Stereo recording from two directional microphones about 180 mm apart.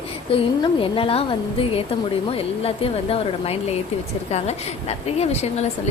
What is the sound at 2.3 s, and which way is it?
Speech, 30° left (ahead or behind).